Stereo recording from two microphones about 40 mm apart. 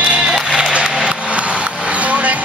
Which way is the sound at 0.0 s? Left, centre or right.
Right.